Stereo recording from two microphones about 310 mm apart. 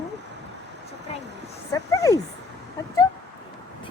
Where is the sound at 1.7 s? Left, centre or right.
Centre.